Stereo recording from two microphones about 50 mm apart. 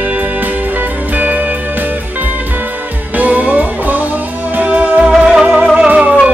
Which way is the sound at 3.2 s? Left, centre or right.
Right.